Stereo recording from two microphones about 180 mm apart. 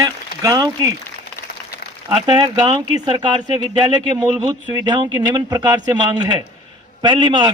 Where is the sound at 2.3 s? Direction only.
25° right (ahead or behind).